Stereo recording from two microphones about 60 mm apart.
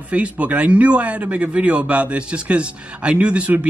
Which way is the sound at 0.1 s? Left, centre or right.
Right.